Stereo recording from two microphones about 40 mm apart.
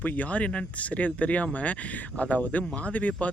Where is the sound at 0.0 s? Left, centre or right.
Left.